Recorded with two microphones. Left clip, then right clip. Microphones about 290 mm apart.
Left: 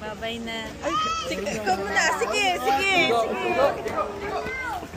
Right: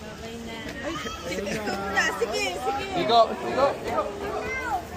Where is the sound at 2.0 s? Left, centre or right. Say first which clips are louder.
Left 1 dB; left.